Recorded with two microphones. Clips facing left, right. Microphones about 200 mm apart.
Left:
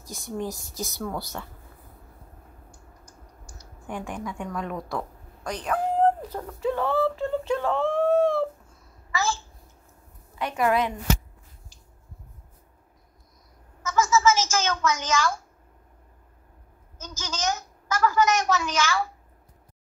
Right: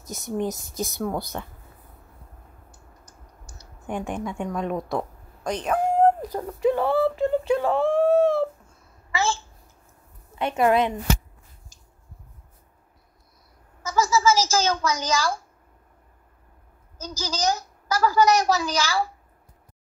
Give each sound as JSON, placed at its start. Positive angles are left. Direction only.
{"t": 0.0, "sound": "speech", "side_deg": -20}
{"t": 3.1, "sound": "typing", "side_deg": -25}
{"t": 6.4, "sound": "speech", "side_deg": -15}
{"t": 9.1, "sound": "babbling", "side_deg": -30}
{"t": 10.4, "sound": "speech", "side_deg": -25}
{"t": 13.8, "sound": "a sound", "side_deg": -35}
{"t": 17.0, "sound": "a child's voice", "side_deg": -35}